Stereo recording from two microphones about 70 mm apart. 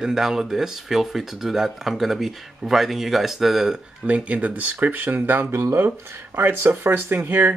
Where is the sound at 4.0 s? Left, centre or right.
Centre.